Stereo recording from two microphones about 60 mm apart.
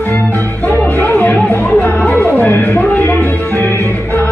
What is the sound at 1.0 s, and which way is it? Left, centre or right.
Music, left.